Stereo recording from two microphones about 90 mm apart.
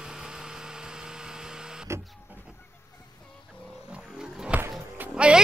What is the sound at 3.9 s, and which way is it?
Roaring cats, 10° right (ahead or behind).